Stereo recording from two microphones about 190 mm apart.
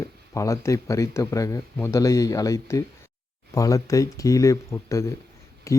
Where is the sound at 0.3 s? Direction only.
15° left (ahead or behind).